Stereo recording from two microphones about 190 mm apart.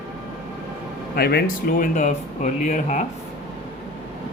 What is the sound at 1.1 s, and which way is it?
Speech, 55° left (ahead or behind).